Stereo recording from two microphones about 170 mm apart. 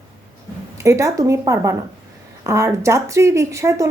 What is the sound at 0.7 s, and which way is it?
A woman's voice, 15° right (ahead or behind).